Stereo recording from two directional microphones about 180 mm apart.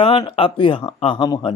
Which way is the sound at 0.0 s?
30° left (ahead or behind).